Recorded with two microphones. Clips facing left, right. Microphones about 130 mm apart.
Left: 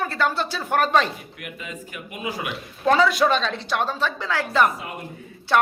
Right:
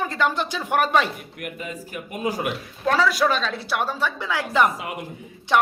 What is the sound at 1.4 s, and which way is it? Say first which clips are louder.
A man's voice: right 4 dB; 35° right (ahead or behind).